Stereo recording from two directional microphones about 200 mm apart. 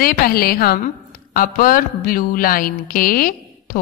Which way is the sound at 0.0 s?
50° left (ahead or behind).